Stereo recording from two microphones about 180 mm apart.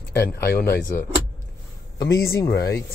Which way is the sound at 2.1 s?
60° left (ahead or behind).